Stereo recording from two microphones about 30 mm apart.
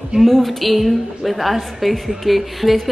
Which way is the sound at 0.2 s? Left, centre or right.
Centre.